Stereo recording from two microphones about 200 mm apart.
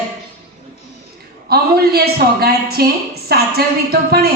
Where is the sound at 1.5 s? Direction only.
50° right (ahead or behind).